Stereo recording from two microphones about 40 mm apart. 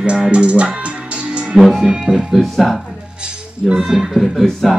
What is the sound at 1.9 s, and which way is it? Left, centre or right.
Music, right.